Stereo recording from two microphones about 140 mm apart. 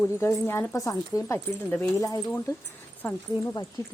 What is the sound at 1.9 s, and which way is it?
Speech, 25° left (ahead or behind).